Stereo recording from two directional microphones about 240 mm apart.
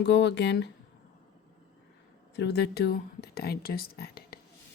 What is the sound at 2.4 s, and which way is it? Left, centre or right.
Speech, left.